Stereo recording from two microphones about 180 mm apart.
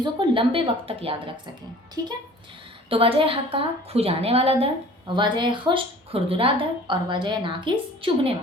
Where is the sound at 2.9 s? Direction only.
30° right (ahead or behind).